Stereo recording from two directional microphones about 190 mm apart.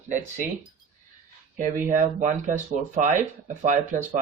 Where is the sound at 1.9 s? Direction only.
40° right (ahead or behind).